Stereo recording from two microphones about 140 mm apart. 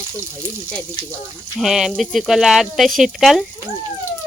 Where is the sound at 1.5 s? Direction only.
5° right (ahead or behind).